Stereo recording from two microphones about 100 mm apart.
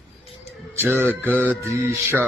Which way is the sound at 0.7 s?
25° right (ahead or behind).